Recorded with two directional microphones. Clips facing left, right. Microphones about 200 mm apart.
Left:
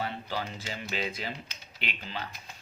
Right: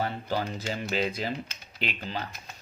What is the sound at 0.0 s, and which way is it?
Speech, 45° right (ahead or behind).